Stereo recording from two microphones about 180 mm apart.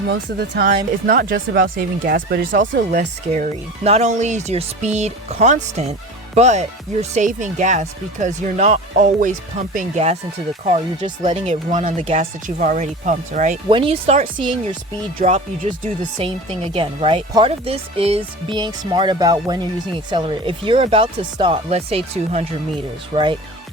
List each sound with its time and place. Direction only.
0.1 s speech: 75° right (ahead or behind)
1.0 s speech: 55° right (ahead or behind)
13.7 s speech: 30° right (ahead or behind)
16.1 s speech: 30° right (ahead or behind)